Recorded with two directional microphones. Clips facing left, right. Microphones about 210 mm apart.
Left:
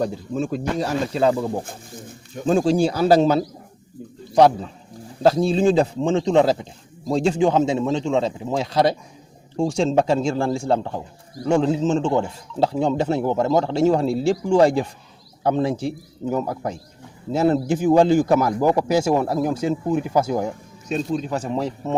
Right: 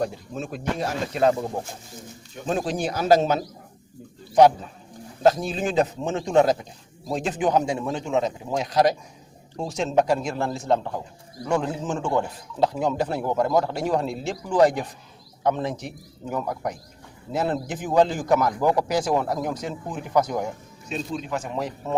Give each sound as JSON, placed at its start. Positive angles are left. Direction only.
{"t": 0.0, "sound": "speech", "side_deg": 30}
{"t": 1.6, "sound": "speech", "side_deg": 50}
{"t": 2.5, "sound": "speech", "side_deg": 30}
{"t": 5.2, "sound": "speech", "side_deg": 30}
{"t": 20.8, "sound": "speech", "side_deg": 40}